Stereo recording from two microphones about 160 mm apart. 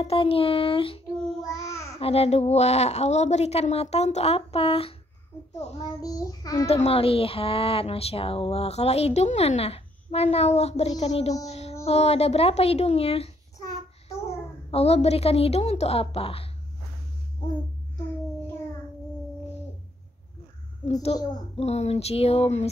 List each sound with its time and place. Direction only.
0.0 s speech: 35° left (ahead or behind)
5.8 s a child's voice: 20° left (ahead or behind)
6.7 s speech: 40° left (ahead or behind)
14.7 s speech: 40° left (ahead or behind)
20.8 s speech: 40° left (ahead or behind)